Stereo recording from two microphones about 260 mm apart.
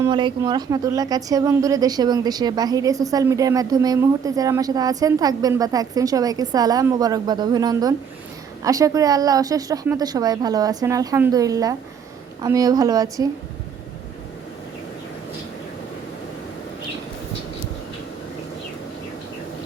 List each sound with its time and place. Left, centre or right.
0.0 s a woman's voice: centre